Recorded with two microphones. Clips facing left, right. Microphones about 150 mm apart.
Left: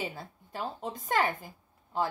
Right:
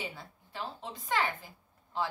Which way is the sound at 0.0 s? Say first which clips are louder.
Left 4 dB; 45° left (ahead or behind).